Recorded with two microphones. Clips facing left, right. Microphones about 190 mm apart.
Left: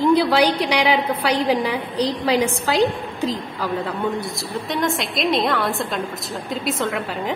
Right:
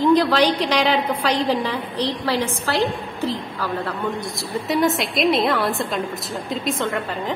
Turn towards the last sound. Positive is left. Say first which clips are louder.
# even
turn(degrees=5)  # may be behind; listen again after turning